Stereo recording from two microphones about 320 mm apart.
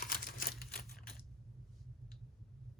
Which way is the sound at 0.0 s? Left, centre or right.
Left.